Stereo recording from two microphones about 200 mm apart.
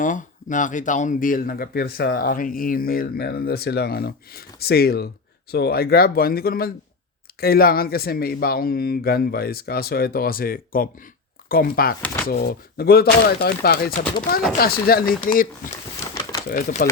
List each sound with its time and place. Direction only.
0.0 s speech: 40° left (ahead or behind)
16.5 s speech: 45° left (ahead or behind)